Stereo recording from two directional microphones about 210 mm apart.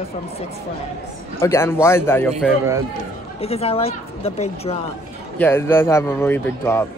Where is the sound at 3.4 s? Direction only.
30° left (ahead or behind).